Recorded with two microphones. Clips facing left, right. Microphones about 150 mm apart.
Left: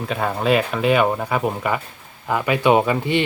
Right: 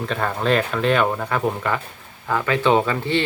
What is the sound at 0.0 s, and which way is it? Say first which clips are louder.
Speech: left 1 dB; 10° left (ahead or behind).